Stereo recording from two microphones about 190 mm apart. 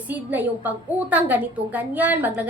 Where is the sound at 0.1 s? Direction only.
10° right (ahead or behind).